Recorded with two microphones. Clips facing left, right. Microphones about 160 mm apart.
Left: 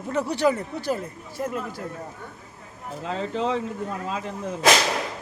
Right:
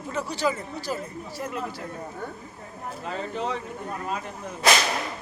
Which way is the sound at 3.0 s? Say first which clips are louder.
Left 4 dB; 90° left.